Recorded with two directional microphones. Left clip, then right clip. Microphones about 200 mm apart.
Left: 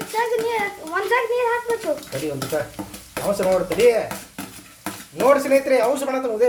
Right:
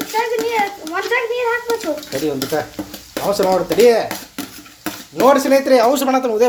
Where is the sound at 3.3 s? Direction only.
40° right (ahead or behind).